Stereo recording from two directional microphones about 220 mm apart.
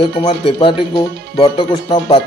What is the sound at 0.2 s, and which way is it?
Speech, 25° left (ahead or behind).